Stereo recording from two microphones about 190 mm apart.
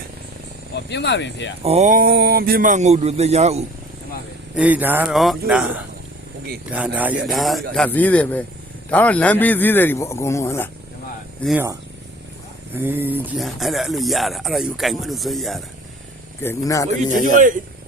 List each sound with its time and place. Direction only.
0.9 s speech: 65° left (ahead or behind)
1.6 s speech: 35° right (ahead or behind)
4.5 s a man's voice: 10° right (ahead or behind); by 10.7 s 15° left (ahead or behind)
12.7 s speech: 10° right (ahead or behind)
16.4 s a man's voice: 15° left (ahead or behind)
17.3 s speech: 45° right (ahead or behind)